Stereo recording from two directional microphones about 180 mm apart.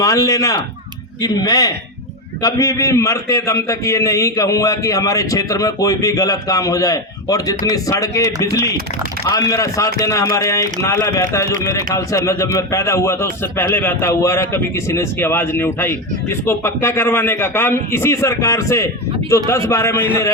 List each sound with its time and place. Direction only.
0.0 s a man's voice: 20° left (ahead or behind)